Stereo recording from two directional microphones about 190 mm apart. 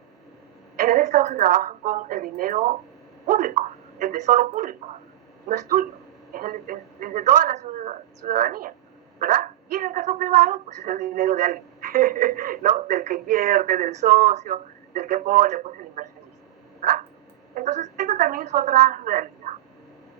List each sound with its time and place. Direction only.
0.9 s speech: 40° right (ahead or behind)
17.5 s speech: 40° right (ahead or behind)